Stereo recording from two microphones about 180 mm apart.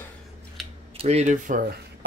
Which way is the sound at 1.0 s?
35° right (ahead or behind).